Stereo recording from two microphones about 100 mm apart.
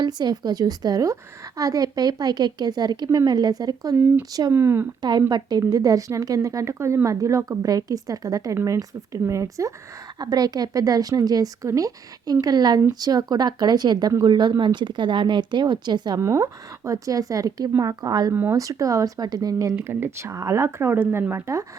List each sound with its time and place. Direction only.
0.0 s a woman's voice: 45° right (ahead or behind)
3.9 s speech: 25° right (ahead or behind)
5.3 s a woman's voice: 40° right (ahead or behind)
16.2 s a woman's voice: 30° right (ahead or behind)
19.7 s speech: 25° right (ahead or behind)